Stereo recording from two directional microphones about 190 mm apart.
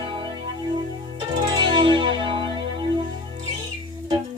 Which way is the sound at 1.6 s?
25° right (ahead or behind).